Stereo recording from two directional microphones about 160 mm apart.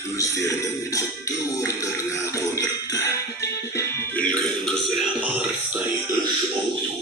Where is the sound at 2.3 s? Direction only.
20° left (ahead or behind).